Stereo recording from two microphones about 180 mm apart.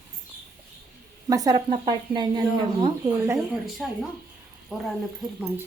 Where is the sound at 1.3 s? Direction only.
20° right (ahead or behind).